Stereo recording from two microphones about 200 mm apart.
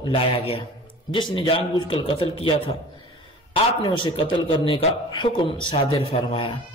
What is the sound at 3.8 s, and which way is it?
A man's voice, 25° left (ahead or behind).